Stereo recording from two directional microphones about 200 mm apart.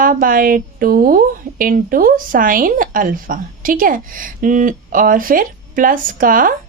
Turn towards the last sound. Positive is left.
turn(degrees=-45)  # may be behind; listen again after turning